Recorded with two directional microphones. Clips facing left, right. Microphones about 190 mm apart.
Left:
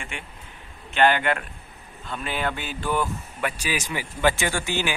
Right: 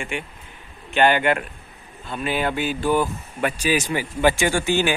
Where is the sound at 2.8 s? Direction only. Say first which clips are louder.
Right 3 dB; 30° right (ahead or behind).